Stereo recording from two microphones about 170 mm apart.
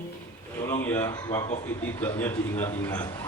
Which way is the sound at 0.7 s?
15° left (ahead or behind).